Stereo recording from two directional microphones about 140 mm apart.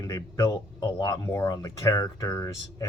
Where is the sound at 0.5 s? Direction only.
30° left (ahead or behind).